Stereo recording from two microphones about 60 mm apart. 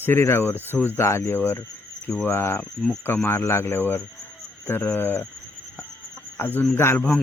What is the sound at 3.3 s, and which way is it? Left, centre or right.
Speech, left.